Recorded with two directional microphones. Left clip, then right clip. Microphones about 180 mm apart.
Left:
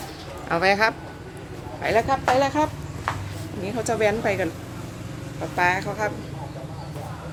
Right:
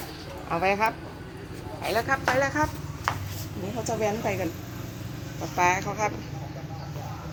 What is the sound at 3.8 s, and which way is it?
Speech, 20° left (ahead or behind).